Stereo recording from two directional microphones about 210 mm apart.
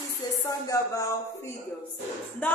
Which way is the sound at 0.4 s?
15° left (ahead or behind).